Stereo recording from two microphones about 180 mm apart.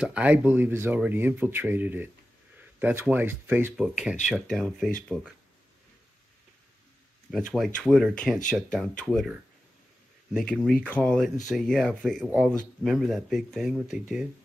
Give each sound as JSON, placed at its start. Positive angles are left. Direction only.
{"t": 0.0, "sound": "speech", "side_deg": -5}
{"t": 7.2, "sound": "speech", "side_deg": 0}